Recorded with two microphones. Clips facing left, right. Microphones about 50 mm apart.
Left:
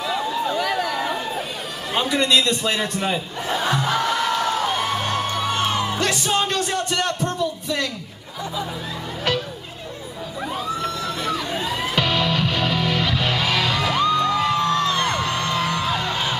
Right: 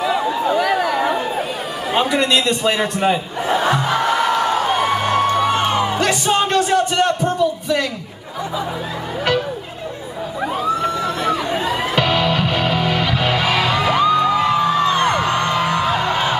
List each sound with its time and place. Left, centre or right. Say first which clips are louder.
0.0 s a sound: right 5 dB; centre
0.6 s chatter: right 6 dB; centre
2.0 s a man's voice: right 2 dB; centre
3.0 s a sound: right 6 dB; centre
10.6 s music: right 7 dB; centre
15.0 s music: right 5 dB; right